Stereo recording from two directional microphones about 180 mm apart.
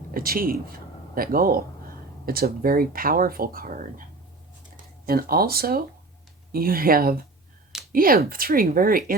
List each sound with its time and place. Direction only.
0.1 s speech: 55° right (ahead or behind)
5.0 s speech: 55° right (ahead or behind)